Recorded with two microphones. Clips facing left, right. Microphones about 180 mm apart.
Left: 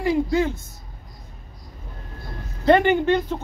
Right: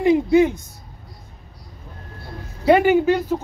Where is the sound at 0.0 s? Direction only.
20° right (ahead or behind).